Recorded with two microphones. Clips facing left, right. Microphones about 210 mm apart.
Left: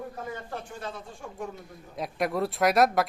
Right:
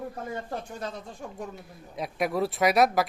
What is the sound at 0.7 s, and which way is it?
Speech, 40° right (ahead or behind).